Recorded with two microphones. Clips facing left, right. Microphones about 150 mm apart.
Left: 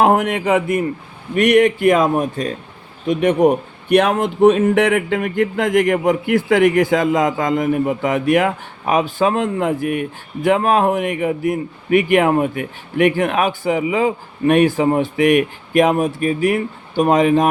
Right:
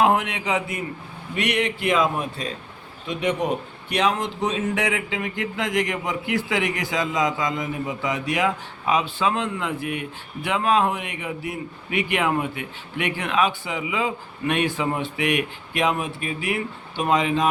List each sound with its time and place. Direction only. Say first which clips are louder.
0.0 s a man's voice: left 6 dB; 50° left (ahead or behind)